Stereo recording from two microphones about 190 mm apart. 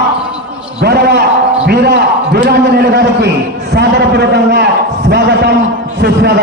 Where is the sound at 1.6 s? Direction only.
60° right (ahead or behind).